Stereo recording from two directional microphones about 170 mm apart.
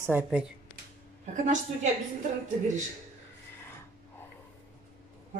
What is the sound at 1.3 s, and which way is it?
Speech, 45° right (ahead or behind).